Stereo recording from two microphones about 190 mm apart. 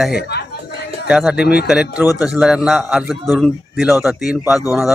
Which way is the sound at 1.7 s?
5° right (ahead or behind).